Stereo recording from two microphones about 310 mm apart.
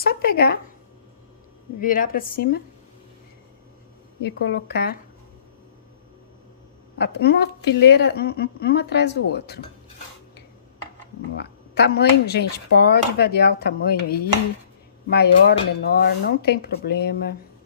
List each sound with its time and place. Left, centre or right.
0.0 s a woman's voice: left
1.8 s a woman's voice: left
4.2 s speech: left
7.0 s speech: left
11.3 s speech: left